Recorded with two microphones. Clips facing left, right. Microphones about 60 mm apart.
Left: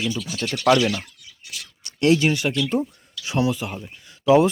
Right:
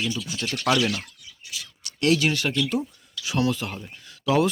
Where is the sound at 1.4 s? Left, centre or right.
Left.